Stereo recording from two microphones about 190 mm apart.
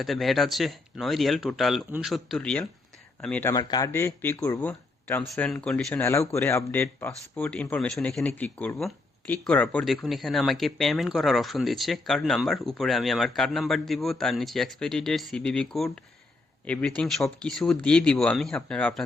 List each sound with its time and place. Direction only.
0.0 s speech: centre (ahead or behind)
3.5 s speech: 20° left (ahead or behind); by 19.0 s 5° left (ahead or behind)